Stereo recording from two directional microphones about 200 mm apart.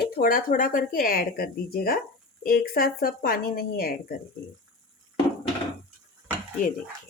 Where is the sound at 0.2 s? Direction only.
45° left (ahead or behind).